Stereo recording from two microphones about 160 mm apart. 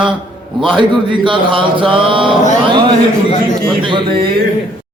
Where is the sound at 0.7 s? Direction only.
30° right (ahead or behind).